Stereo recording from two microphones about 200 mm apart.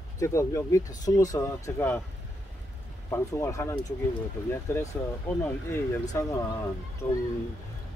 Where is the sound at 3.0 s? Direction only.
15° left (ahead or behind).